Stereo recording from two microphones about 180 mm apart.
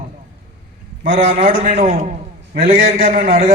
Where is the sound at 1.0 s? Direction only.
50° right (ahead or behind).